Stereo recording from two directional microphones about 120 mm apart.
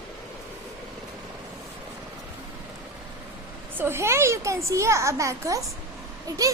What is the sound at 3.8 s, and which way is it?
A child's voice, 20° right (ahead or behind).